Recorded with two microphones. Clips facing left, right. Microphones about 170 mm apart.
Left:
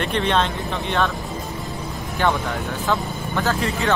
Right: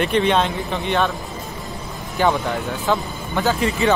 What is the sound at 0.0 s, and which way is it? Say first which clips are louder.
Speech: right 3 dB; 5° right (ahead or behind).